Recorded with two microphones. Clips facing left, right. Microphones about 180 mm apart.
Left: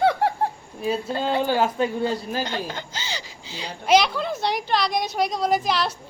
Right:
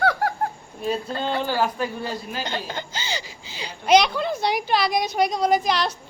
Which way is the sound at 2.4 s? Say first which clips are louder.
Even; centre (ahead or behind).